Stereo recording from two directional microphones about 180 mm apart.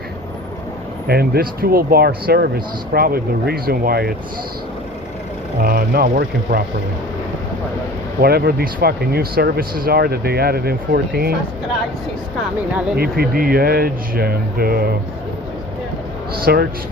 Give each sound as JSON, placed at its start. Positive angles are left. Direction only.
{"t": 1.0, "sound": "speech", "side_deg": -60}
{"t": 5.5, "sound": "speech", "side_deg": -55}
{"t": 8.2, "sound": "speech", "side_deg": -60}
{"t": 13.0, "sound": "speech", "side_deg": -55}
{"t": 16.3, "sound": "speech", "side_deg": -60}